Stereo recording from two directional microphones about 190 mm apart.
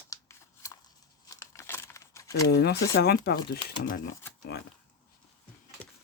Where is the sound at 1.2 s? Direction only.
15° left (ahead or behind).